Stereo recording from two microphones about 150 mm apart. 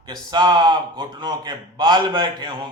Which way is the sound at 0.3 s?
30° right (ahead or behind).